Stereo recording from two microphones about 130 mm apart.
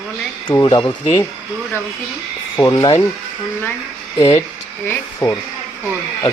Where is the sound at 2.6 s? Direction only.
25° left (ahead or behind).